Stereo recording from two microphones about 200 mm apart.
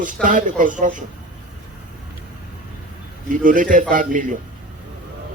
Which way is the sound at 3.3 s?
40° right (ahead or behind).